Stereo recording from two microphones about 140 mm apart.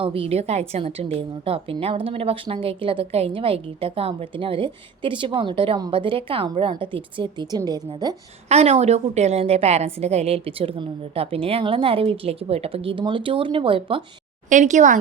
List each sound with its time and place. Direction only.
0.0 s a woman's voice: 40° right (ahead or behind)
8.4 s a woman's voice: 50° right (ahead or behind)
14.5 s a woman's voice: 60° right (ahead or behind)